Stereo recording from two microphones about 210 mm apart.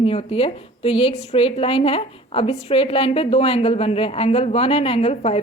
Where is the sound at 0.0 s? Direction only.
30° left (ahead or behind).